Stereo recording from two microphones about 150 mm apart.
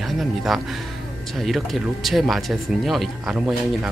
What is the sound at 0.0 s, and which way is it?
Speech, centre (ahead or behind).